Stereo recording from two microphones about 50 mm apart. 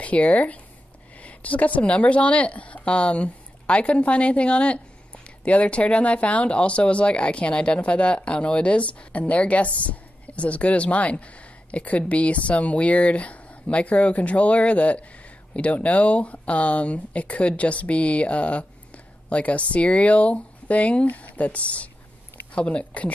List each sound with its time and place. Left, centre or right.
0.0 s speech: left